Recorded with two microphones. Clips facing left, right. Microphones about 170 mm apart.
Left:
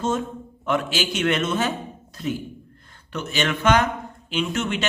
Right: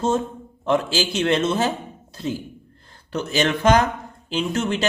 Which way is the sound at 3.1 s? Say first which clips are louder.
Right 4 dB; 35° right (ahead or behind).